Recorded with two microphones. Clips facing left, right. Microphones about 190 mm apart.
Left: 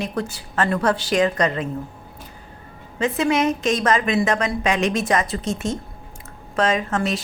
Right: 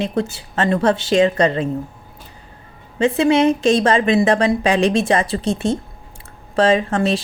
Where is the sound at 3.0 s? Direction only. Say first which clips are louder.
Right 5 dB; 30° right (ahead or behind).